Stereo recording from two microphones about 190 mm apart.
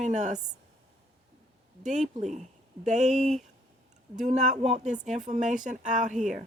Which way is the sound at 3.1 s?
Centre (ahead or behind).